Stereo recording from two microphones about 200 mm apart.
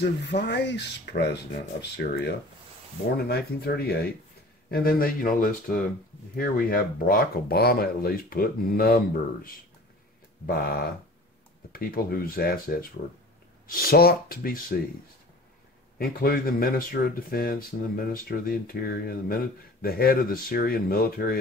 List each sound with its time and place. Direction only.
0.3 s speech: 60° left (ahead or behind)
3.3 s speech: 50° left (ahead or behind)
16.0 s speech: 50° left (ahead or behind)